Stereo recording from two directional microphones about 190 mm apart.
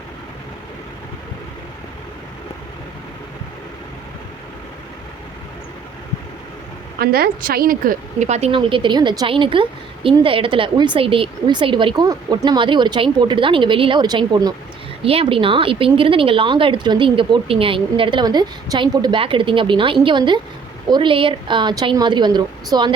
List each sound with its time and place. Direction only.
7.0 s a woman's voice: 55° right (ahead or behind); by 22.9 s 20° right (ahead or behind)